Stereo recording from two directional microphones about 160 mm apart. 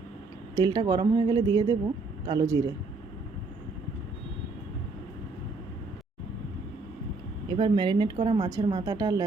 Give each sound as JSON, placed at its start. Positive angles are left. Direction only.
{"t": 0.5, "sound": "speech", "side_deg": -25}
{"t": 7.5, "sound": "speech", "side_deg": -30}